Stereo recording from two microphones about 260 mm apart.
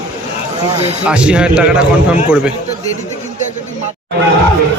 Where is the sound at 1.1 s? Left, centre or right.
Centre.